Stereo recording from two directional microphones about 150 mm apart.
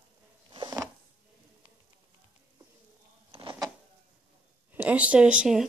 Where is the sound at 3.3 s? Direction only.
35° right (ahead or behind).